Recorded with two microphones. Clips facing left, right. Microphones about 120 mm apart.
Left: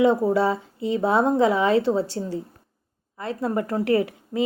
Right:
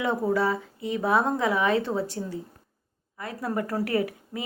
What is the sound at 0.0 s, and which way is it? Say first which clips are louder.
A woman's voice: left 6 dB; 25° left (ahead or behind).